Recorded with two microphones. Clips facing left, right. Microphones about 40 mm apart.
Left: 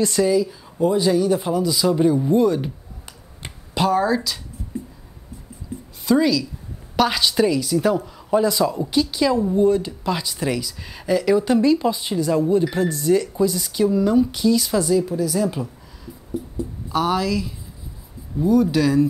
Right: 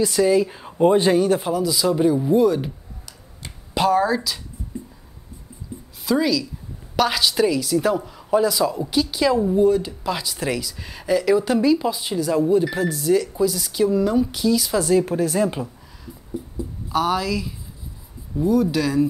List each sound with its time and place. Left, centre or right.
0.0 s a woman's voice: centre
0.3 s speech: right
1.5 s speech: centre
3.7 s speech: centre
6.0 s a woman's voice: centre
14.8 s speech: right
15.4 s speech: right
16.5 s speech: centre